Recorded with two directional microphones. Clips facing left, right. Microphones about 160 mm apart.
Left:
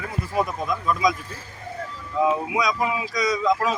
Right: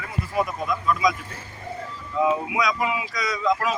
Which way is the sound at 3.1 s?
20° left (ahead or behind).